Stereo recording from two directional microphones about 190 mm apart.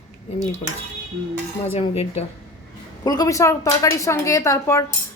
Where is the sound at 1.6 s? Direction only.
30° left (ahead or behind).